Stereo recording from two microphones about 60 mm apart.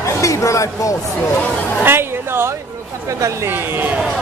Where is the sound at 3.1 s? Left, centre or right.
Right.